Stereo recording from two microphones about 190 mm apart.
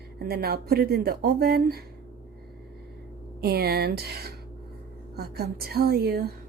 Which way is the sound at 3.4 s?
55° right (ahead or behind).